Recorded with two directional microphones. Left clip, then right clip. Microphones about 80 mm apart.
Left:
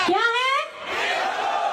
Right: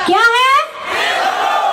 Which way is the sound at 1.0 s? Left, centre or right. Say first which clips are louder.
Right 9 dB; right.